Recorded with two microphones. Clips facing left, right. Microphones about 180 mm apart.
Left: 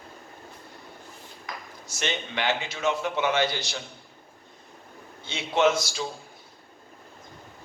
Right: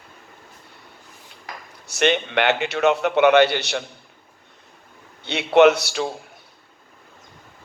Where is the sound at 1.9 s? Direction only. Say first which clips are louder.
Right 11 dB; 65° right (ahead or behind).